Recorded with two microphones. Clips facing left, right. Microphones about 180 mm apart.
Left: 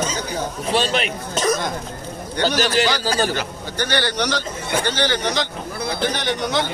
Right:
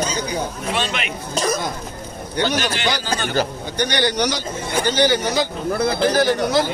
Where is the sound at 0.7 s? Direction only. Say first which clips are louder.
Left 6 dB; 35° left (ahead or behind).